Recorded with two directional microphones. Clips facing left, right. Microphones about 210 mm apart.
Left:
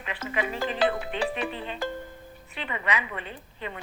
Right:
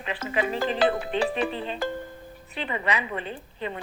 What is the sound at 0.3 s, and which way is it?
A woman's voice, 30° right (ahead or behind).